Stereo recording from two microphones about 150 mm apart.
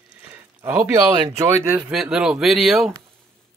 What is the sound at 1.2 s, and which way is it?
Speech, 20° right (ahead or behind).